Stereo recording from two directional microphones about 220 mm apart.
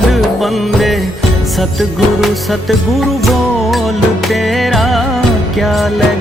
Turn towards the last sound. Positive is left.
turn(degrees=0)  # may be behind; listen again after turning